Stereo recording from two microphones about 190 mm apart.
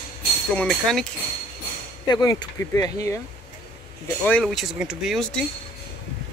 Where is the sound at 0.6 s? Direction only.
5° left (ahead or behind).